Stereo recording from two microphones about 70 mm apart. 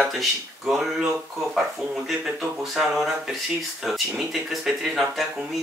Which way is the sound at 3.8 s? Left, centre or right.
Centre.